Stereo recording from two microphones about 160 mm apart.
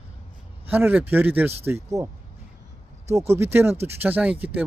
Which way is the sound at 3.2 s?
15° right (ahead or behind).